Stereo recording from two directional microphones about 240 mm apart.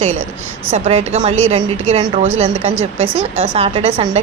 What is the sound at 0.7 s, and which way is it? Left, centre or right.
Speech, right.